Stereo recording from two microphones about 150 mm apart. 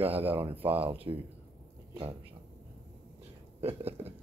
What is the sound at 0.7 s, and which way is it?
Speech, 40° right (ahead or behind).